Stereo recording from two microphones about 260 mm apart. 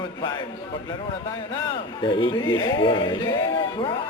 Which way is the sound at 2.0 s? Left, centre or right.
Centre.